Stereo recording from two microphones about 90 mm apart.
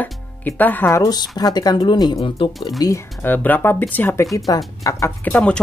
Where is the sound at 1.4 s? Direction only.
45° left (ahead or behind).